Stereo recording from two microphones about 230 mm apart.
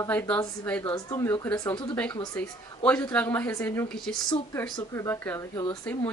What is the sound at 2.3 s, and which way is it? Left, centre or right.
A woman's voice, centre.